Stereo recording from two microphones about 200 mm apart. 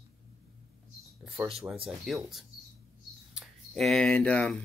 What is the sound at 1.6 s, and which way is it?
Speech, 5° right (ahead or behind).